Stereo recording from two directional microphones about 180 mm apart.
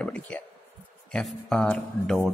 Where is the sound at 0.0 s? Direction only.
10° left (ahead or behind).